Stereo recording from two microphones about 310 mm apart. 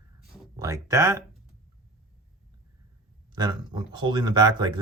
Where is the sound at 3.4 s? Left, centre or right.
Centre.